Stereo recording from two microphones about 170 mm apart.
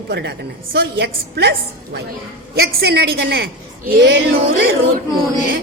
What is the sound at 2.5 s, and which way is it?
A woman's voice, 65° right (ahead or behind).